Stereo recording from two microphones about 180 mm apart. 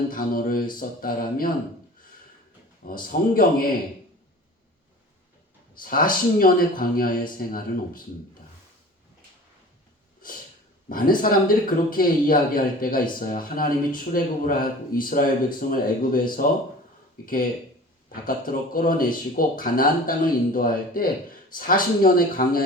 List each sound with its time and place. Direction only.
0.1 s speech: 50° left (ahead or behind)
2.8 s speech: 50° left (ahead or behind)
5.8 s speech: 50° left (ahead or behind)
10.8 s speech: 50° left (ahead or behind)
18.1 s speech: 50° left (ahead or behind)